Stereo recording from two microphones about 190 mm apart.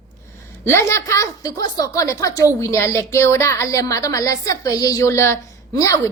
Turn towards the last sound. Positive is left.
turn(degrees=15)  # may be behind; listen again after turning